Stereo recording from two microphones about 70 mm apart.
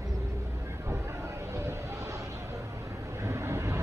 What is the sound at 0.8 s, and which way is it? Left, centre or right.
Vehicle, right.